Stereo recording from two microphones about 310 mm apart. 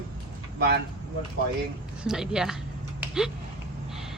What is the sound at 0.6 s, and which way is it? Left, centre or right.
Speech, right.